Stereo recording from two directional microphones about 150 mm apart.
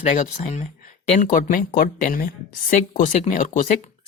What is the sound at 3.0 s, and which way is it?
Speech, 50° left (ahead or behind).